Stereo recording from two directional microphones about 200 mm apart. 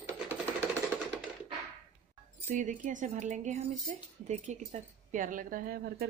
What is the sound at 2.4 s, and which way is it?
Speech, 40° right (ahead or behind).